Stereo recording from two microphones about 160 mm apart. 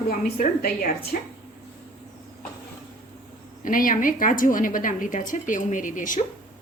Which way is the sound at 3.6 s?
55° left (ahead or behind).